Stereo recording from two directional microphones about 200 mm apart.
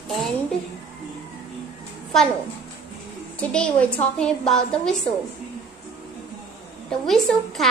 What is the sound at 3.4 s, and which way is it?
A woman's voice, 5° left (ahead or behind).